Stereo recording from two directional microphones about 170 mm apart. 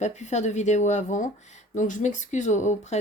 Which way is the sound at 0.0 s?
40° left (ahead or behind).